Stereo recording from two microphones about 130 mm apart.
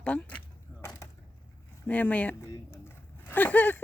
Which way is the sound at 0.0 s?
10° left (ahead or behind).